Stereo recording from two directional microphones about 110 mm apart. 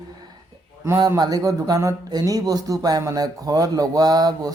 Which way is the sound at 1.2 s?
35° right (ahead or behind).